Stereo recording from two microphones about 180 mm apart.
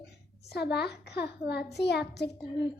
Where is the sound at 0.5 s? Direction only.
65° left (ahead or behind).